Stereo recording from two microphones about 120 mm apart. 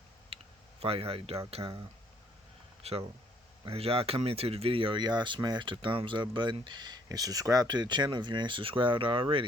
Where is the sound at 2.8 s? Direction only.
55° right (ahead or behind).